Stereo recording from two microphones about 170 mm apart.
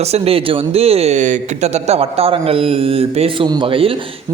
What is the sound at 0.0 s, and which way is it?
Speech, 35° right (ahead or behind).